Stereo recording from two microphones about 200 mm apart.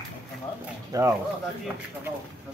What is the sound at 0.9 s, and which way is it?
Speech, 15° right (ahead or behind).